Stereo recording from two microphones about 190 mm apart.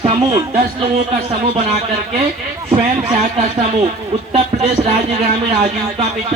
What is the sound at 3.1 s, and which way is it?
Speech, 45° right (ahead or behind).